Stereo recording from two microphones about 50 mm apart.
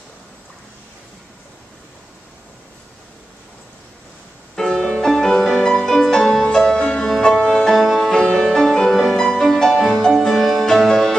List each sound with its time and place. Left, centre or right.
4.6 s music: centre
7.7 s music: centre
8.0 s music: centre